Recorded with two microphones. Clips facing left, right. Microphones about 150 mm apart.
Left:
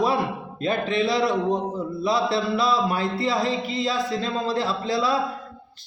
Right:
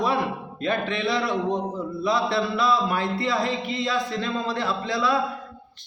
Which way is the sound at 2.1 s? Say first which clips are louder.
Left 1 dB; 30° left (ahead or behind).